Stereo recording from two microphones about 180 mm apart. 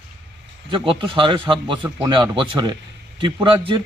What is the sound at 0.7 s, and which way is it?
A man's voice, 30° right (ahead or behind).